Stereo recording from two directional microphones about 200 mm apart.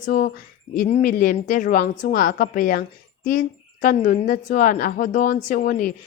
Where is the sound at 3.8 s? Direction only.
40° left (ahead or behind).